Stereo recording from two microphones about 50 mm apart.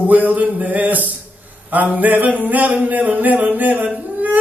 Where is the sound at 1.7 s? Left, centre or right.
Right.